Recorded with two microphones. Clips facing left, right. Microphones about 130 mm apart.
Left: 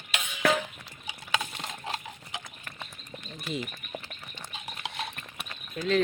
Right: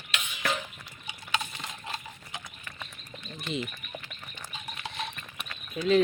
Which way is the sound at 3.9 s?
15° left (ahead or behind).